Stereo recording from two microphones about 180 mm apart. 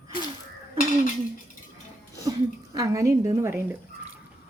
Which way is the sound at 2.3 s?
20° right (ahead or behind).